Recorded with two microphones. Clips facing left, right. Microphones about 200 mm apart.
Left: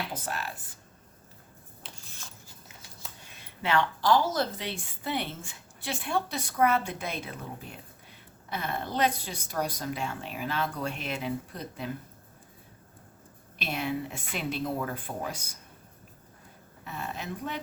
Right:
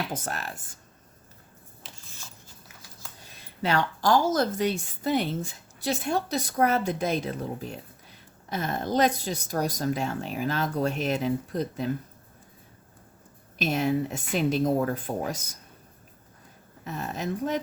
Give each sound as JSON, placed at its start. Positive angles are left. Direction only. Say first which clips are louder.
{"t": 0.1, "sound": "a woman's voice", "louder": "right 2 dB", "side_deg": -45}
{"t": 3.2, "sound": "a woman's voice", "louder": "right 3 dB", "side_deg": -40}
{"t": 13.6, "sound": "a woman's voice", "louder": "right 7 dB", "side_deg": -40}
{"t": 16.8, "sound": "a woman's voice", "louder": "right 5 dB", "side_deg": -40}